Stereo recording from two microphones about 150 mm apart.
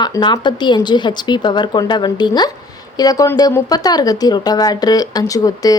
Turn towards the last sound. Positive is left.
turn(degrees=25)  # may be behind; listen again after turning